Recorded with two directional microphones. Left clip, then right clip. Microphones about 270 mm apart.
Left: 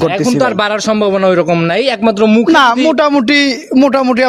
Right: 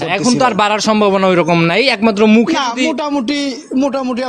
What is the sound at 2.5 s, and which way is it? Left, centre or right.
A man's voice, left.